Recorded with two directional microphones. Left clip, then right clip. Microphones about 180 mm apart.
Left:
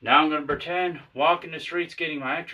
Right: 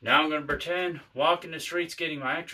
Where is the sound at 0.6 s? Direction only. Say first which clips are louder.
Left 3 dB; 35° right (ahead or behind).